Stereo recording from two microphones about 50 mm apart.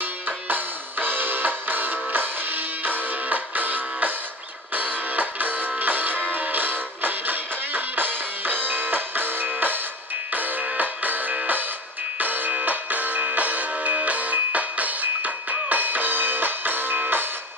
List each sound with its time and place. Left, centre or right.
0.5 s music: right